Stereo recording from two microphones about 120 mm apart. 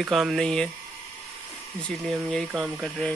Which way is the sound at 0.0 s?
Centre (ahead or behind).